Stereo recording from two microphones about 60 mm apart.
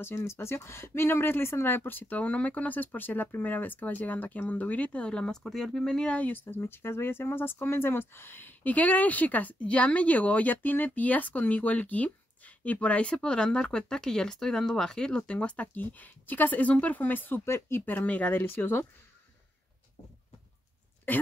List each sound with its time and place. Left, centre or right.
0.0 s speech: left; by 6.1 s centre
6.1 s speech: left
17.5 s speech: left
21.1 s speech: left